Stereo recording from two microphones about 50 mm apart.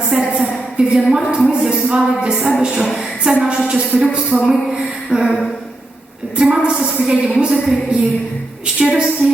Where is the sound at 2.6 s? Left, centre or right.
Centre.